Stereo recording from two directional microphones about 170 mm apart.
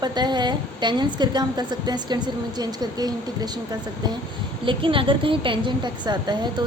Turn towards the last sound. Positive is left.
turn(degrees=-25)  # may be behind; listen again after turning